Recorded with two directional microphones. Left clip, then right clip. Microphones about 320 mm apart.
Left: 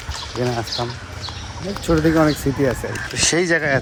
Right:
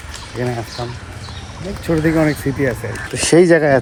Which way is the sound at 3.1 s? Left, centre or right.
Centre.